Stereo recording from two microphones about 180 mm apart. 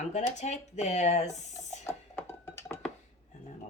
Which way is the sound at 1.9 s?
15° left (ahead or behind).